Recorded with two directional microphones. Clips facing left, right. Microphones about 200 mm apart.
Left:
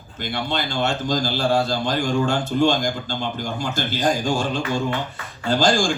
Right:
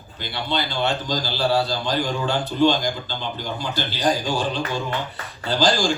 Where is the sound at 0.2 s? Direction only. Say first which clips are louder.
Left 1 dB; 45° left (ahead or behind).